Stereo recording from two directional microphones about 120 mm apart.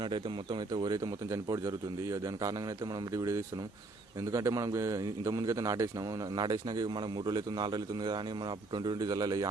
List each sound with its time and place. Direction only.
0.0 s a man's voice: 40° right (ahead or behind)